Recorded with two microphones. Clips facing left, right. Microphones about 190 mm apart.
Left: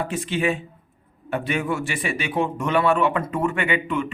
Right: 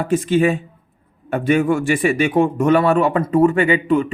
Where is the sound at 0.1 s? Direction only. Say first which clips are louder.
Right 8 dB; 45° right (ahead or behind).